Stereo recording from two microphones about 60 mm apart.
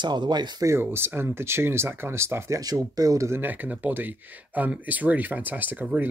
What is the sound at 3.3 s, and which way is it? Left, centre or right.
Speech, right.